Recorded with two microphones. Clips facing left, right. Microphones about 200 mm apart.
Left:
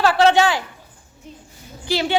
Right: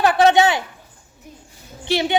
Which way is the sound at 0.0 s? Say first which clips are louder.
Right 1 dB; 20° right (ahead or behind).